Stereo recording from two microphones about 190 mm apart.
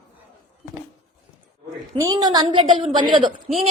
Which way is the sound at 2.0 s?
20° right (ahead or behind).